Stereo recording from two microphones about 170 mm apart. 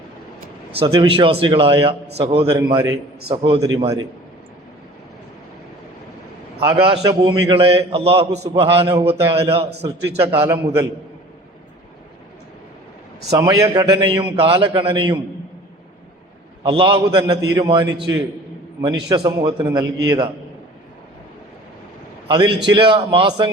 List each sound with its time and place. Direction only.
0.8 s a man's voice: 30° right (ahead or behind)
2.6 s a man's voice: 20° right (ahead or behind)
3.2 s a man's voice: 30° right (ahead or behind)
6.7 s a man's voice: 30° right (ahead or behind)
9.8 s a man's voice: 15° right (ahead or behind)
13.3 s a man's voice: 20° right (ahead or behind)
14.3 s a man's voice: 30° right (ahead or behind)
16.6 s a man's voice: 30° right (ahead or behind)
19.0 s a man's voice: 25° right (ahead or behind)
22.3 s a man's voice: 25° right (ahead or behind)